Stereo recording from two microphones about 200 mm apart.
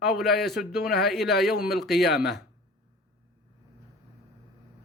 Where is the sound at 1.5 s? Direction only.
50° left (ahead or behind).